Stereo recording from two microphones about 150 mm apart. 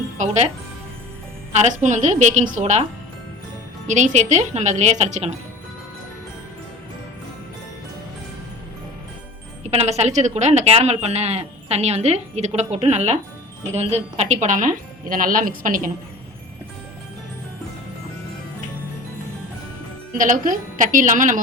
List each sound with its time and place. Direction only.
1.6 s a woman's voice: 55° right (ahead or behind)
3.8 s a woman's voice: 55° right (ahead or behind)
9.6 s a woman's voice: 45° right (ahead or behind); by 15.9 s 65° right (ahead or behind)
20.1 s speech: 60° right (ahead or behind)